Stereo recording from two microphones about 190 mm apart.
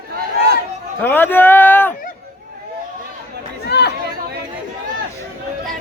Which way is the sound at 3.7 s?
65° left (ahead or behind).